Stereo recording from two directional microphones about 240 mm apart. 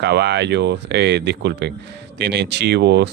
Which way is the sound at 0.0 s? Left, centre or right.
Right.